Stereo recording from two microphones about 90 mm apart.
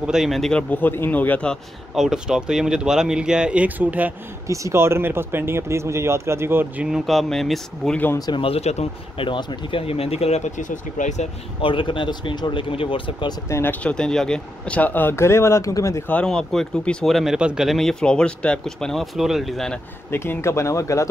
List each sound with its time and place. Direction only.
0.0 s speech: 5° right (ahead or behind); by 1.6 s 15° left (ahead or behind)
2.0 s speech: 5° right (ahead or behind)
4.5 s speech: 30° right (ahead or behind)
7.1 s speech: centre (ahead or behind)
8.3 s speech: 75° left (ahead or behind)
9.2 s speech: 60° left (ahead or behind); by 10.2 s 90° left
11.6 s speech: 70° left (ahead or behind)
13.5 s speech: 30° left (ahead or behind)
13.8 s speech: 10° left (ahead or behind); by 16.0 s 35° left (ahead or behind)
16.3 s speech: 5° left (ahead or behind)
20.1 s speech: 25° left (ahead or behind)